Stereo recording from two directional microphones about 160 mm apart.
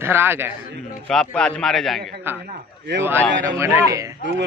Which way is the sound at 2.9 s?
90° right.